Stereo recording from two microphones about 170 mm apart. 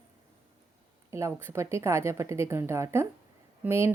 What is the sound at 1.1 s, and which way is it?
A woman's voice, 15° right (ahead or behind).